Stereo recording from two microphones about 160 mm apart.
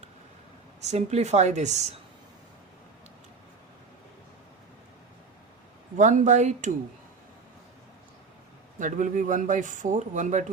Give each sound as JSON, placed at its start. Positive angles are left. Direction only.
{"t": 0.8, "sound": "speech", "side_deg": -45}
{"t": 6.0, "sound": "speech", "side_deg": -50}
{"t": 8.8, "sound": "speech", "side_deg": -50}